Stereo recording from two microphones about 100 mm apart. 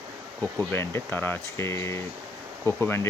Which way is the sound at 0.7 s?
25° left (ahead or behind).